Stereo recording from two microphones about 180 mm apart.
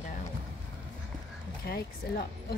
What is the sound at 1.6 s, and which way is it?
Speech, 60° left (ahead or behind).